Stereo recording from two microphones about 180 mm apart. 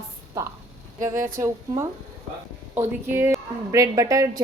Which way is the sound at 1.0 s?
15° right (ahead or behind).